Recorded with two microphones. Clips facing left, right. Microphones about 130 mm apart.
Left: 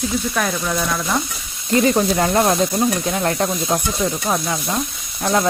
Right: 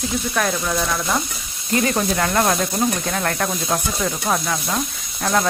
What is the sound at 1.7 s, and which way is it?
Speech, 25° left (ahead or behind).